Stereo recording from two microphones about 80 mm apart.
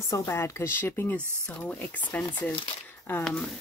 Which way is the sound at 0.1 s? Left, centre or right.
Left.